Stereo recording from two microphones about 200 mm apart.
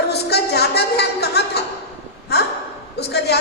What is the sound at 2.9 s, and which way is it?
Speech, 55° left (ahead or behind).